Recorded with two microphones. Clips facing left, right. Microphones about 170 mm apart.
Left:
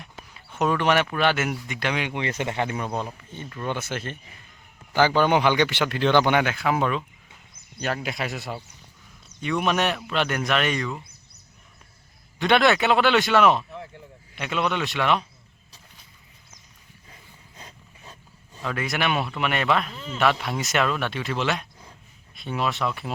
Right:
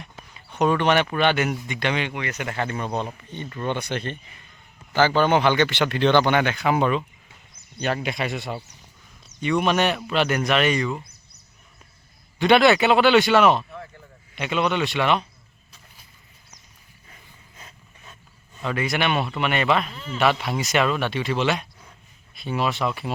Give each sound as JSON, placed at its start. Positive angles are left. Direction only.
{"t": 0.0, "sound": "a sound", "side_deg": 0}
{"t": 1.0, "sound": "speech", "side_deg": 0}
{"t": 2.1, "sound": "speech", "side_deg": 25}
{"t": 3.3, "sound": "speech", "side_deg": 5}
{"t": 12.4, "sound": "speech", "side_deg": 0}
{"t": 17.6, "sound": "dog", "side_deg": 35}
{"t": 18.6, "sound": "speech", "side_deg": 0}